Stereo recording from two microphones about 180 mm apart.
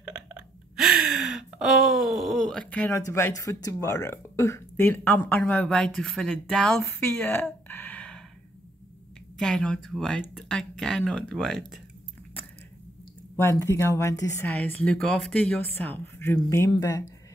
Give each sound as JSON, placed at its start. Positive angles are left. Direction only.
{"t": 0.7, "sound": "gasp", "side_deg": -5}
{"t": 6.8, "sound": "speech", "side_deg": 10}
{"t": 9.4, "sound": "speech", "side_deg": 5}
{"t": 13.4, "sound": "speech", "side_deg": 15}